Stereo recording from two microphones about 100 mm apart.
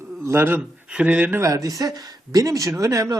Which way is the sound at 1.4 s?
35° right (ahead or behind).